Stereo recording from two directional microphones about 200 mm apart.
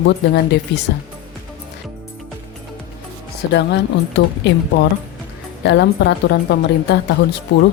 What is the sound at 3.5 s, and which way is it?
Speech, 60° left (ahead or behind).